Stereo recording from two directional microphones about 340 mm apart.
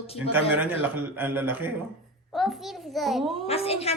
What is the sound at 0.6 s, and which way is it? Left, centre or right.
A man's voice, centre.